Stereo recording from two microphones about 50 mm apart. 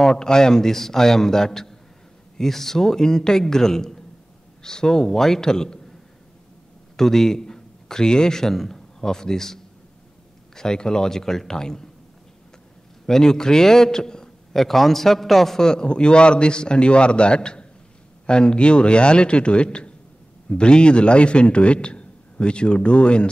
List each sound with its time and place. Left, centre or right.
0.0 s a man's voice: centre
7.0 s a man's voice: centre
13.0 s a man's voice: centre